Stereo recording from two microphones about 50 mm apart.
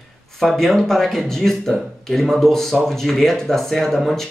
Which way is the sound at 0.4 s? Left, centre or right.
Centre.